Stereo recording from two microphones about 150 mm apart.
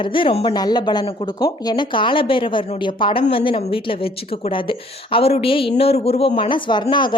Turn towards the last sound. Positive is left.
turn(degrees=30)  # may be behind; listen again after turning